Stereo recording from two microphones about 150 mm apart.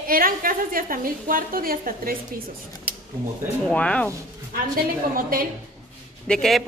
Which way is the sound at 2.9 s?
65° left (ahead or behind).